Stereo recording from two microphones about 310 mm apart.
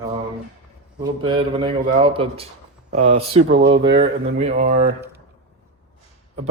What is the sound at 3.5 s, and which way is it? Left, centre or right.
Speech, right.